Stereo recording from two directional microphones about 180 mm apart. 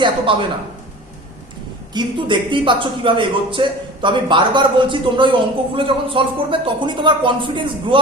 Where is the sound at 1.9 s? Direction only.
25° right (ahead or behind).